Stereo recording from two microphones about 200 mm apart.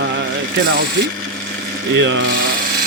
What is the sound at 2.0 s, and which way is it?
Speech, 65° right (ahead or behind).